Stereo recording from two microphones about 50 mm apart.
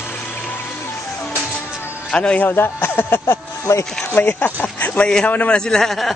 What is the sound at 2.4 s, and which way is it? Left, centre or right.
Speech, left.